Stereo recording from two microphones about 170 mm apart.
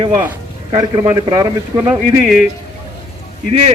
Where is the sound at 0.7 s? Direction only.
15° right (ahead or behind).